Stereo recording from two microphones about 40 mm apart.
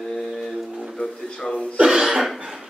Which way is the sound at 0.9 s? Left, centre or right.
Centre.